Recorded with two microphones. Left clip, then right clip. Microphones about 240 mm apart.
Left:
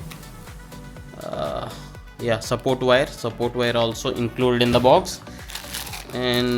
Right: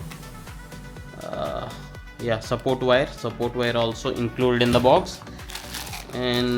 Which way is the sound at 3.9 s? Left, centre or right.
Centre.